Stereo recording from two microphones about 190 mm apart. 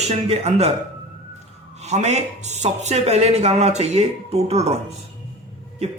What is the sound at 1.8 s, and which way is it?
Speech, 35° right (ahead or behind).